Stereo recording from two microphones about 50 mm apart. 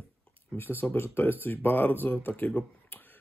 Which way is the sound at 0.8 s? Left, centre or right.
Left.